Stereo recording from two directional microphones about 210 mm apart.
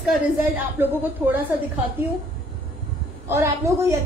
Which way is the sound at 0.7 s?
10° right (ahead or behind).